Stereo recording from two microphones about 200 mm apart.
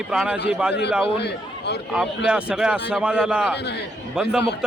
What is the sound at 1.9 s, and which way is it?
A man's voice, 5° right (ahead or behind).